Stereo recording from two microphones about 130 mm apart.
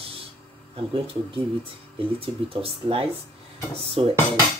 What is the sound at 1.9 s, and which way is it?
Speech, 45° right (ahead or behind).